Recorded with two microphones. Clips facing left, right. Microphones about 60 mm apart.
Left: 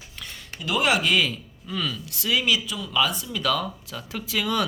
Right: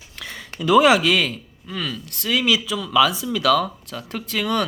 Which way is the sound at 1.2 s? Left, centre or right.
Right.